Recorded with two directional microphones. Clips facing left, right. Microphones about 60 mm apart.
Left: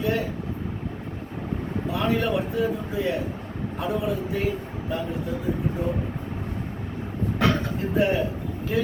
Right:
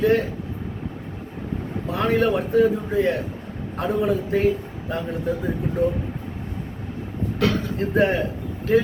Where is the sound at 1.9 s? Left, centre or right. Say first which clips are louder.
Right 4 dB; right.